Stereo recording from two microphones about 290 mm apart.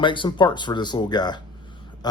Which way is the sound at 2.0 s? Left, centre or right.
Centre.